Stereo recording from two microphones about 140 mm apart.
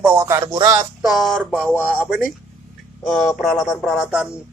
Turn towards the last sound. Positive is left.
turn(degrees=0)  # may be behind; listen again after turning